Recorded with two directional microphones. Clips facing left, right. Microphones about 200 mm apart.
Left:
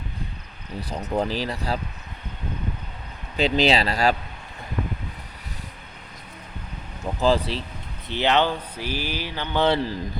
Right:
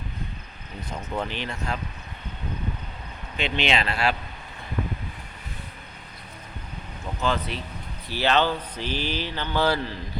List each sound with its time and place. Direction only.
0.8 s speech: 35° left (ahead or behind)
3.3 s speech: 35° left (ahead or behind)
7.2 s speech: 30° left (ahead or behind)
8.0 s mantra: 20° left (ahead or behind)